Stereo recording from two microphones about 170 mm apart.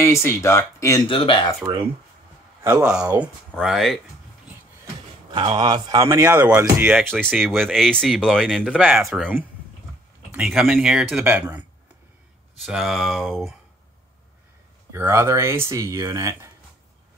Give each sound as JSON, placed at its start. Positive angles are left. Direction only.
{"t": 0.0, "sound": "speech", "side_deg": 15}
{"t": 1.0, "sound": "speech", "side_deg": 30}
{"t": 2.6, "sound": "speech", "side_deg": -10}
{"t": 5.3, "sound": "speech", "side_deg": -30}
{"t": 7.0, "sound": "speech", "side_deg": 5}
{"t": 10.3, "sound": "speech", "side_deg": -5}
{"t": 14.9, "sound": "speech", "side_deg": -15}